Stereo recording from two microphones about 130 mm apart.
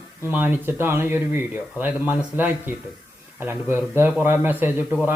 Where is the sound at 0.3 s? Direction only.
15° right (ahead or behind).